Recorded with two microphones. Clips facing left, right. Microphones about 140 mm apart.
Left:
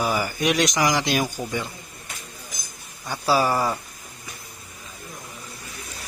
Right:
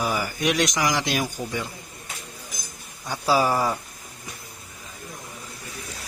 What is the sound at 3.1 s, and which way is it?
Speech, 15° right (ahead or behind).